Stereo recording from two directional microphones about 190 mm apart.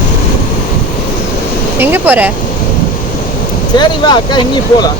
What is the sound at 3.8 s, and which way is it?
Speech, 25° left (ahead or behind).